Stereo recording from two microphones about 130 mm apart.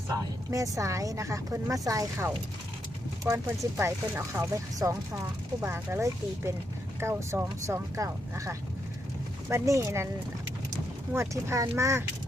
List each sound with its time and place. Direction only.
0.1 s speech: 25° right (ahead or behind)
11.1 s speech: 20° right (ahead or behind)